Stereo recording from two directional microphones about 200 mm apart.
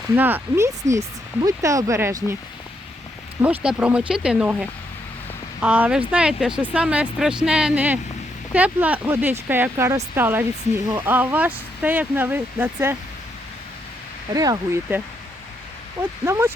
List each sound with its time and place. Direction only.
0.2 s speech: 10° right (ahead or behind)
3.4 s speech: 5° right (ahead or behind)
14.3 s speech: 20° right (ahead or behind)
16.2 s speech: 15° right (ahead or behind)